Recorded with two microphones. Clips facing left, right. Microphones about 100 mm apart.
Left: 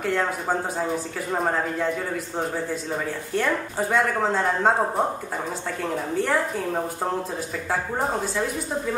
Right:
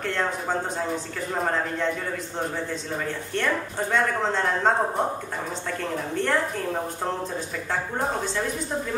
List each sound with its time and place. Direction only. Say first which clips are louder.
0.0 s speech: left 2 dB; 5° left (ahead or behind)
3.3 s speech: left 2 dB; 5° left (ahead or behind)